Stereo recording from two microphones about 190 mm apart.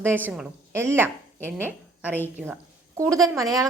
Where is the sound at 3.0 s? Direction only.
15° right (ahead or behind).